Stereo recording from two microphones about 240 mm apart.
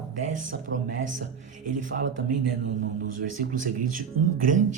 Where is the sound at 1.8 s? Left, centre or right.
Right.